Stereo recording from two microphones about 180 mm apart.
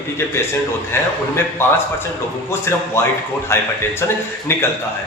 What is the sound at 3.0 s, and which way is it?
Speech, 15° left (ahead or behind).